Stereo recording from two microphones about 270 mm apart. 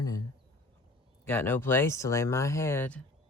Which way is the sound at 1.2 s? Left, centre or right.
Centre.